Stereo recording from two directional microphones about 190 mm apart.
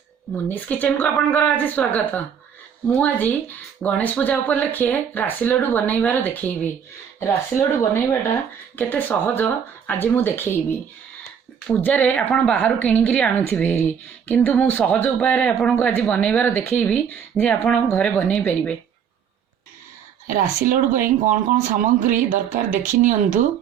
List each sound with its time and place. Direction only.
0.3 s speech: 10° left (ahead or behind)
8.7 s speech: 10° left (ahead or behind)
20.2 s speech: 45° right (ahead or behind)